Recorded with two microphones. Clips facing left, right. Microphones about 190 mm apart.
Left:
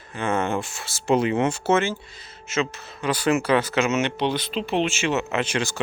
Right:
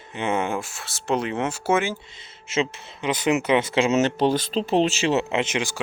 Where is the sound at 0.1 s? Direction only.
20° right (ahead or behind).